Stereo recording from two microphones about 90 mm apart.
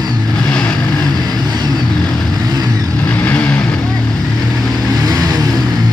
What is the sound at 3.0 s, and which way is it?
Vehicle, 20° left (ahead or behind).